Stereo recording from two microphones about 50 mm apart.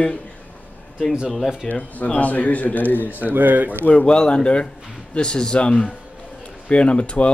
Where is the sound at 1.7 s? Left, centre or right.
Left.